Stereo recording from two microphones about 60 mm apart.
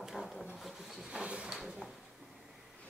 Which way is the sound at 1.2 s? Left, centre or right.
Centre.